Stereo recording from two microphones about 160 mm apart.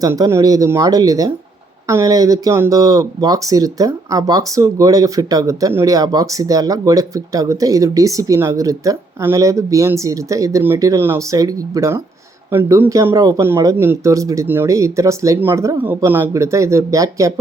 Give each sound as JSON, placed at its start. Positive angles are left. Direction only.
{"t": 0.0, "sound": "speech", "side_deg": -20}